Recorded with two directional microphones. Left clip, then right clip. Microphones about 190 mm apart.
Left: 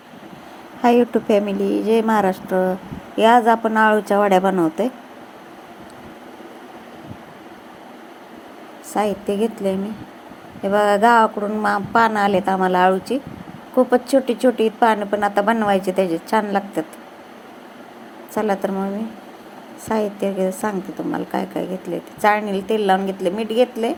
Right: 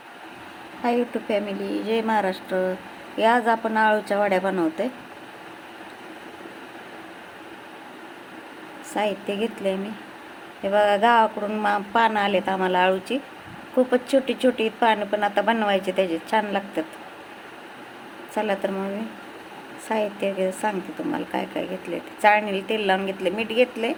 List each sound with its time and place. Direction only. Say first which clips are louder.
0.8 s a woman's voice: left 8 dB; 25° left (ahead or behind)
9.0 s a woman's voice: left 5 dB; 15° left (ahead or behind)
18.3 s a woman's voice: left 4 dB; 15° left (ahead or behind)
19.9 s a woman's voice: left 3 dB; 15° left (ahead or behind)